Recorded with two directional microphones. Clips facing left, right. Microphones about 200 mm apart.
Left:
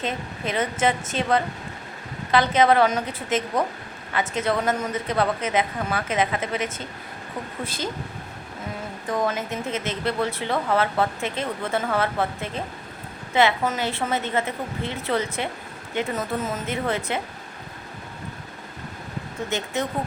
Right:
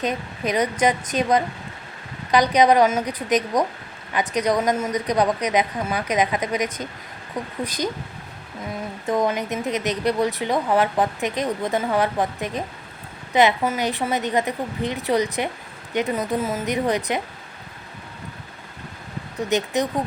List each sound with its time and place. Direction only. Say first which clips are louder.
0.0 s speech: right 4 dB; 15° right (ahead or behind)
9.0 s speech: right 3 dB; 20° right (ahead or behind)
19.5 s speech: right 6 dB; 15° right (ahead or behind)